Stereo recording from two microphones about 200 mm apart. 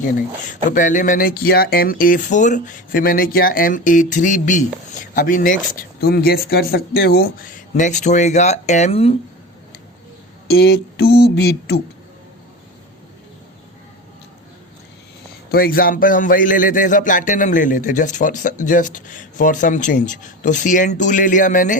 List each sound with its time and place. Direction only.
0.7 s speech: 40° left (ahead or behind)
10.5 s a sound: 55° left (ahead or behind)
15.5 s a man's voice: 45° left (ahead or behind)